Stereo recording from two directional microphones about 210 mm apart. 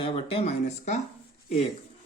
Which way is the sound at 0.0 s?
25° left (ahead or behind).